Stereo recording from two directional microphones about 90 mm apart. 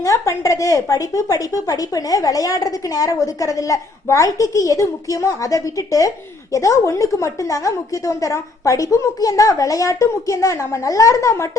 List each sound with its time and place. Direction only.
0.0 s speech: 40° left (ahead or behind)